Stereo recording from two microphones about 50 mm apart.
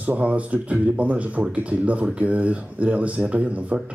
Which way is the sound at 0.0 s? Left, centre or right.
Right.